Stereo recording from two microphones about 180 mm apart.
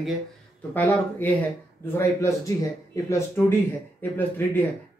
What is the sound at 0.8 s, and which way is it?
Speech, 10° left (ahead or behind).